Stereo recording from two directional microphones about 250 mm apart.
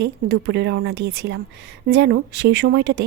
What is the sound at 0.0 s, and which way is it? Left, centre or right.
Speech, right.